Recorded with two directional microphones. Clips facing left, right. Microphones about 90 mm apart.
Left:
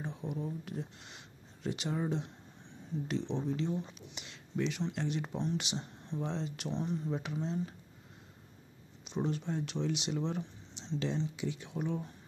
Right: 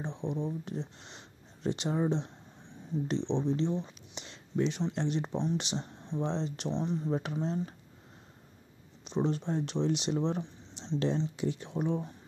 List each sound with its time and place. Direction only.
0.0 s speech: 25° right (ahead or behind)
7.1 s speech: 35° right (ahead or behind)
9.0 s speech: 35° right (ahead or behind)
10.8 s a sound: 40° right (ahead or behind)
11.3 s speech: 40° right (ahead or behind)